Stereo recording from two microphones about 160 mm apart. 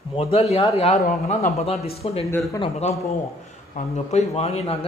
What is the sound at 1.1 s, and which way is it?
Speech, 55° left (ahead or behind).